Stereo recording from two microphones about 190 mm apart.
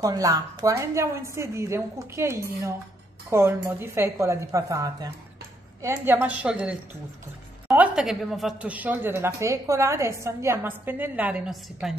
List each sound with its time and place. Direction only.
0.0 s a woman's voice: 20° right (ahead or behind); by 11.9 s 5° right (ahead or behind)